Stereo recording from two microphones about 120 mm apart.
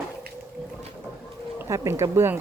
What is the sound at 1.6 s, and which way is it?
Speech, 20° right (ahead or behind).